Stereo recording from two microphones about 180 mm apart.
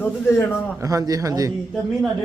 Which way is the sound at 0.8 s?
20° right (ahead or behind).